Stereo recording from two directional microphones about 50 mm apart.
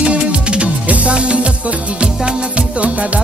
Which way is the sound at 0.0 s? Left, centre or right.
Right.